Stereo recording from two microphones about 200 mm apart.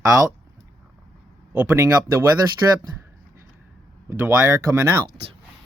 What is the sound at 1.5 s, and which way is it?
Speech, 10° right (ahead or behind).